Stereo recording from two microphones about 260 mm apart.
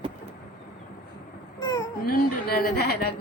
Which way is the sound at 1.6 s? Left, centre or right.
Centre.